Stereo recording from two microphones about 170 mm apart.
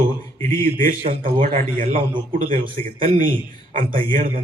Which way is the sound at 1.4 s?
50° right (ahead or behind).